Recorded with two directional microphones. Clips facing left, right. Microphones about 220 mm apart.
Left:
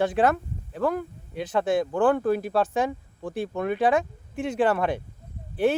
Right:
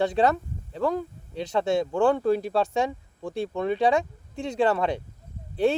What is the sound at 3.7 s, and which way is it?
Speech, 20° right (ahead or behind).